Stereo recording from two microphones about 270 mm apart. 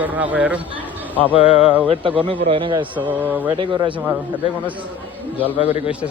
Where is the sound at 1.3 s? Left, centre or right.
Left.